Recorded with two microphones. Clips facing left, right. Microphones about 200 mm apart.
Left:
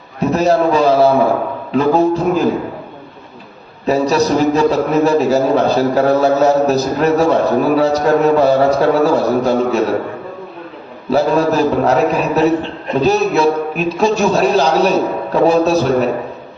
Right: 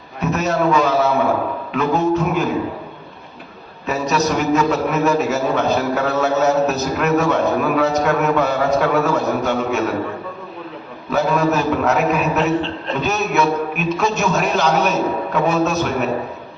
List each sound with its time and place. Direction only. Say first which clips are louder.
0.2 s a man's voice: left 6 dB; 35° left (ahead or behind)
3.8 s a man's voice: left 6 dB; 35° left (ahead or behind)
11.1 s a man's voice: left 4 dB; 30° left (ahead or behind)